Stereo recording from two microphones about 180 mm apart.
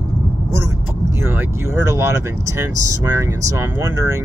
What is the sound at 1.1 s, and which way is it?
Speech, 10° right (ahead or behind).